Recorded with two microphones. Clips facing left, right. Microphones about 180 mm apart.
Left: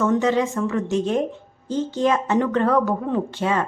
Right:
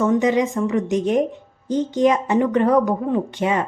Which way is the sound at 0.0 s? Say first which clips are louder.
Right 2 dB; 15° right (ahead or behind).